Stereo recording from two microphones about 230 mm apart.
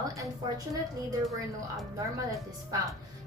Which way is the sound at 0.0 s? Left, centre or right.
Centre.